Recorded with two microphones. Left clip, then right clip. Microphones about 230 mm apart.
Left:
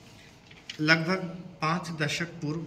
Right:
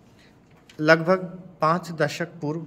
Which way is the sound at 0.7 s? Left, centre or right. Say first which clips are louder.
Right 7 dB; centre.